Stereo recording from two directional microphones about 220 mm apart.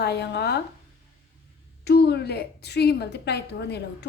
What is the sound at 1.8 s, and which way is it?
Female singing, 50° left (ahead or behind).